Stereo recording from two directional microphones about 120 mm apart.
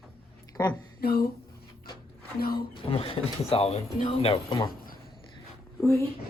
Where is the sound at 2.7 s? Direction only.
50° left (ahead or behind).